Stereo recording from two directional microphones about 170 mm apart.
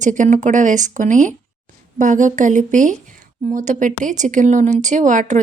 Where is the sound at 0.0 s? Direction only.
50° right (ahead or behind).